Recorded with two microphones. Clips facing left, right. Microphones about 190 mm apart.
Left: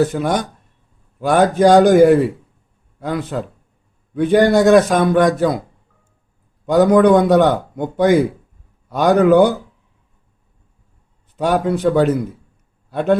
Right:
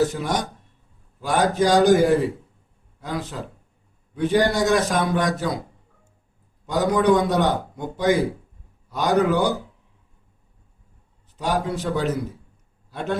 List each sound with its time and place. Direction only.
0.1 s a man's voice: 55° left (ahead or behind)
6.7 s a man's voice: 60° left (ahead or behind)
11.3 s a man's voice: 55° left (ahead or behind)